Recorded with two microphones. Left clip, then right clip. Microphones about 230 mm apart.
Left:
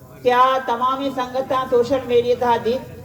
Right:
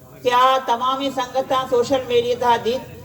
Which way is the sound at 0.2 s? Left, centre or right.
Right.